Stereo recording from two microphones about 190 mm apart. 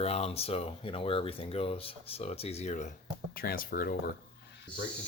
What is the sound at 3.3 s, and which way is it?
Speech, 50° left (ahead or behind).